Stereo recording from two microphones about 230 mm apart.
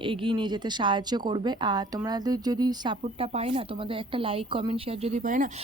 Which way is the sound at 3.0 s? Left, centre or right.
Right.